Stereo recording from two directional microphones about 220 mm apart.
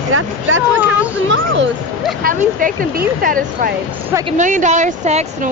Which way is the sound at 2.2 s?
40° right (ahead or behind).